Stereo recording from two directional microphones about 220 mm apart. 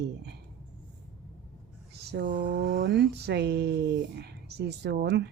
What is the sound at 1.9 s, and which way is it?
Speech, 50° right (ahead or behind).